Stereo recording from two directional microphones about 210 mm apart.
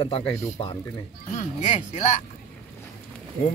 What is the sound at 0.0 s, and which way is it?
Speech, 25° left (ahead or behind).